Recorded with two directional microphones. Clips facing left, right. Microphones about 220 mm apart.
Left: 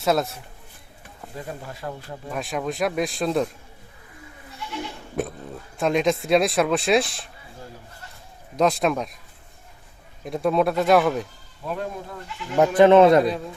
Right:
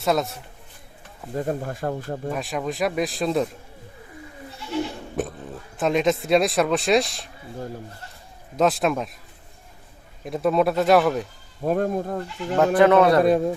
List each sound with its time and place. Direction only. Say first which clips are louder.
0.0 s speech: even; centre (ahead or behind)
1.4 s speech: right 8 dB; 50° right (ahead or behind)
2.3 s speech: left 3 dB; centre (ahead or behind)
5.7 s speech: even; centre (ahead or behind)
8.5 s speech: even; centre (ahead or behind)
10.2 s speech: right 1 dB; centre (ahead or behind)
11.6 s speech: right 8 dB; 45° right (ahead or behind)
12.5 s speech: left 2 dB; 20° left (ahead or behind)
13.2 s speech: right 7 dB; 50° right (ahead or behind)